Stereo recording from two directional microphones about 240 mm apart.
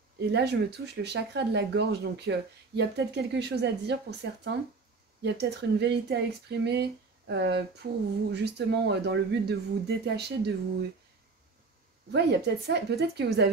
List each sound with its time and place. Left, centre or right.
0.3 s speech: right
12.1 s speech: right